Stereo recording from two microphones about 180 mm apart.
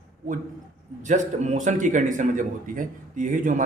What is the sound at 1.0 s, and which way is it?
A man's voice, 45° right (ahead or behind).